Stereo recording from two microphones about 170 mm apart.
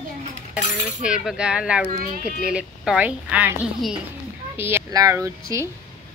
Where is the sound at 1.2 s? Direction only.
5° right (ahead or behind).